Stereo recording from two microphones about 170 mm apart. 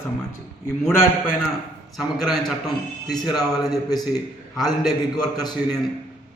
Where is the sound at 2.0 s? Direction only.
Centre (ahead or behind).